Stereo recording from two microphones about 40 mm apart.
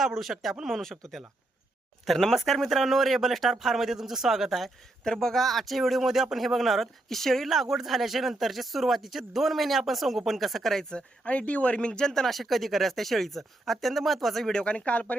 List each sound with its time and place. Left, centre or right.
0.0 s speech: centre
5.0 s speech: centre
7.5 s speech: centre
10.8 s speech: centre
11.3 s speech: left
12.2 s speech: centre
14.5 s speech: left